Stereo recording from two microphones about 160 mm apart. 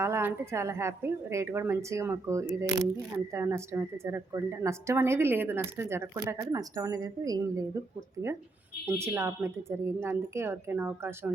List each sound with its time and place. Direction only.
0.0 s a woman's voice: 15° right (ahead or behind)
8.9 s a woman's voice: 15° right (ahead or behind)